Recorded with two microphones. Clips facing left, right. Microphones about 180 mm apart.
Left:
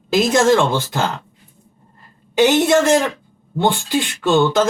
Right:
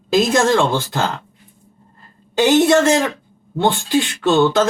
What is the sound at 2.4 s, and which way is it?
Speech, 15° left (ahead or behind).